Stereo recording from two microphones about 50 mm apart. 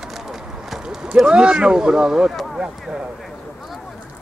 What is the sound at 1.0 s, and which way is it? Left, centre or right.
Speech, centre.